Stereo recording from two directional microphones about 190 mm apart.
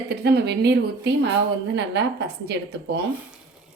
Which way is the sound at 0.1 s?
60° right (ahead or behind).